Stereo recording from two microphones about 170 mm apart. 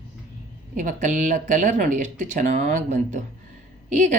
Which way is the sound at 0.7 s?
45° right (ahead or behind).